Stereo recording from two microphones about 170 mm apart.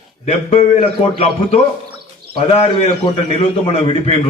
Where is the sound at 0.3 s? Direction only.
35° left (ahead or behind).